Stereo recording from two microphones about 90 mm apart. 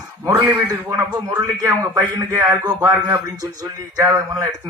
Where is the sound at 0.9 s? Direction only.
40° right (ahead or behind).